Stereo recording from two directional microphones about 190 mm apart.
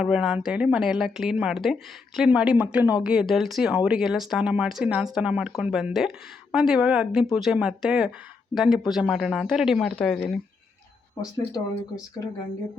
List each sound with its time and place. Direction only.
0.0 s speech: 5° right (ahead or behind)
11.2 s speech: 15° left (ahead or behind)